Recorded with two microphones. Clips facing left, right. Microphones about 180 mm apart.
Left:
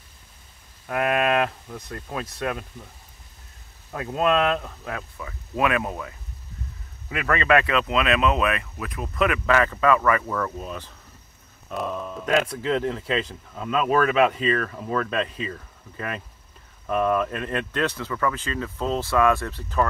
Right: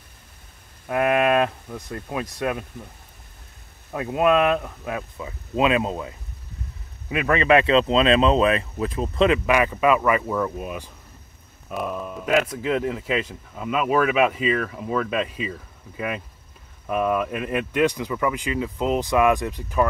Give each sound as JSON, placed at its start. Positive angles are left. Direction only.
{"t": 0.8, "sound": "speech", "side_deg": -15}
{"t": 3.9, "sound": "speech", "side_deg": -15}
{"t": 9.5, "sound": "speech", "side_deg": -15}